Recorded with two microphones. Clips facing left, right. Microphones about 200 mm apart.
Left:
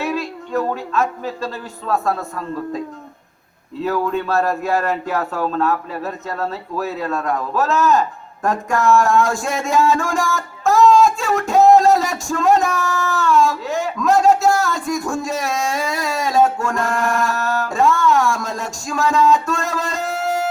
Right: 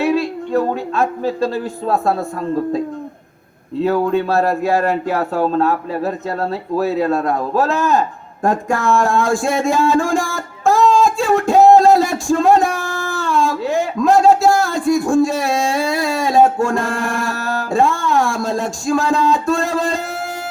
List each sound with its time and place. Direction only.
0.0 s a woman's voice: 35° right (ahead or behind)
3.8 s speech: 35° right (ahead or behind)
8.4 s a sound: 35° right (ahead or behind)